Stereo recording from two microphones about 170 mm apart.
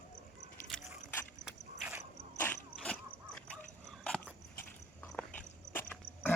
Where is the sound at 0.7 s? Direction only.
5° left (ahead or behind).